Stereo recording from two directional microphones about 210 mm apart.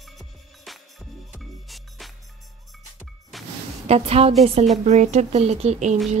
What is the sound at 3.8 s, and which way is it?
A woman's voice, 30° right (ahead or behind).